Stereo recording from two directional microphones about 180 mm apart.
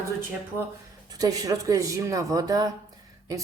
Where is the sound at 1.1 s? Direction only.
20° right (ahead or behind).